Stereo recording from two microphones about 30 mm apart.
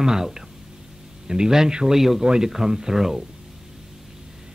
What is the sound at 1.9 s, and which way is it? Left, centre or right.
A man's voice, centre.